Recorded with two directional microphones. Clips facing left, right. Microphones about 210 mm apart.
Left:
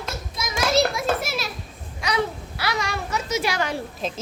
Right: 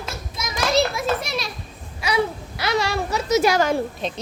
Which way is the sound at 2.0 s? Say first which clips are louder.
Right 2 dB; 10° right (ahead or behind).